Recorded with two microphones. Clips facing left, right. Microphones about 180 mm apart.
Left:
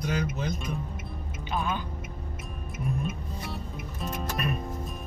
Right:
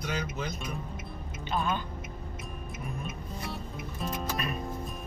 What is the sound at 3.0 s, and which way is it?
Music, centre (ahead or behind).